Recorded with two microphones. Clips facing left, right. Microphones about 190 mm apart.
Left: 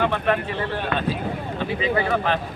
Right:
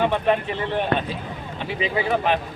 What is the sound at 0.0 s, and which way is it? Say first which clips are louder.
A man's voice: right 1 dB; 15° right (ahead or behind).